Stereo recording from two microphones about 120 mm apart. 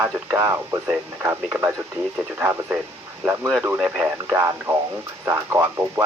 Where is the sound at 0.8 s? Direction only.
15° right (ahead or behind).